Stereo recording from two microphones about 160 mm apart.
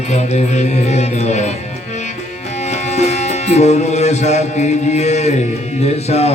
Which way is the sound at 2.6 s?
45° left (ahead or behind).